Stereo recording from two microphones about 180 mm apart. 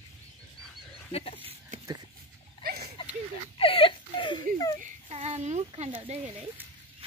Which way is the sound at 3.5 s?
30° left (ahead or behind).